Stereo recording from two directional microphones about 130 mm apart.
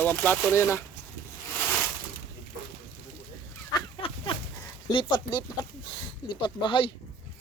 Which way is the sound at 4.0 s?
45° left (ahead or behind).